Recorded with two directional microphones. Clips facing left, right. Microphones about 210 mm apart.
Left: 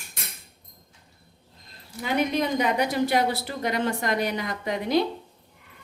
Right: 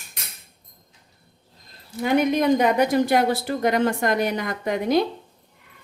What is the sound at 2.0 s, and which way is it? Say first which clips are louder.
A woman's voice: right 6 dB; 50° right (ahead or behind).